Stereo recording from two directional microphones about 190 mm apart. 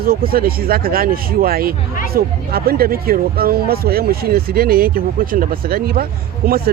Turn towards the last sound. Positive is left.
turn(degrees=-50)  # may be behind; listen again after turning